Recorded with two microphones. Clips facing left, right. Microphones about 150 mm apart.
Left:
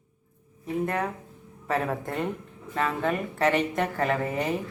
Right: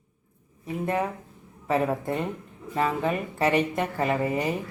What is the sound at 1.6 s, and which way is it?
Speech, 5° right (ahead or behind).